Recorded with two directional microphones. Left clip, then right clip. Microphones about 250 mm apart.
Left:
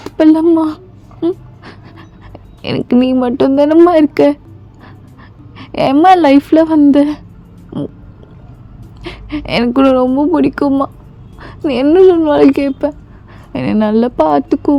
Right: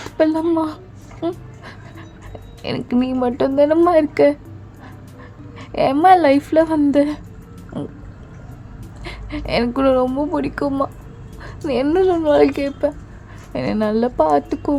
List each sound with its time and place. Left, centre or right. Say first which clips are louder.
0.2 s speech: left 8 dB; left
2.6 s speech: left 8 dB; left
5.5 s speech: left 6 dB; left
9.0 s speech: left 5 dB; left